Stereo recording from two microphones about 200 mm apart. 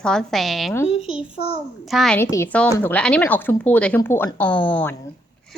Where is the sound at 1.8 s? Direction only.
Centre (ahead or behind).